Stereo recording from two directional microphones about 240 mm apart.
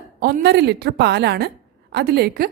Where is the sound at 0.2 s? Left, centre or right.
Right.